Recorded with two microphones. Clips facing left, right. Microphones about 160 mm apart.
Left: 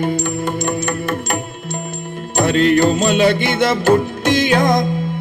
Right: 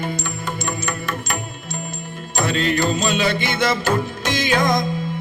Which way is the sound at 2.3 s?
60° left (ahead or behind).